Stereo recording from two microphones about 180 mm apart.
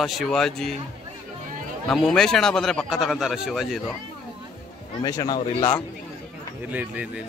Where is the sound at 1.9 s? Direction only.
Centre (ahead or behind).